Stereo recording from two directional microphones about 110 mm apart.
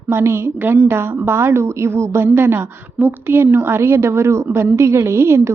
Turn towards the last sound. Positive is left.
turn(degrees=-25)  # may be behind; listen again after turning